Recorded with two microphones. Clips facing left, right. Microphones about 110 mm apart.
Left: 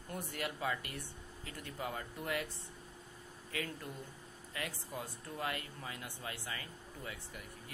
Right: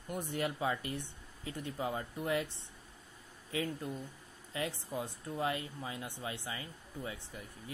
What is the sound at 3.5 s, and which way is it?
Speech, 25° right (ahead or behind).